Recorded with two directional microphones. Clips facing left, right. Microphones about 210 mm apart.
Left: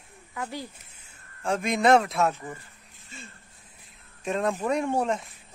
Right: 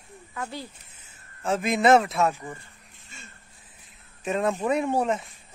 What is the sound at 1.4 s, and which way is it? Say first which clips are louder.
A man's voice: right 1 dB; 5° right (ahead or behind).